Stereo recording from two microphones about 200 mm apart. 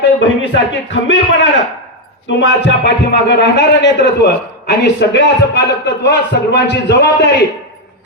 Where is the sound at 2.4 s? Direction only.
60° left (ahead or behind).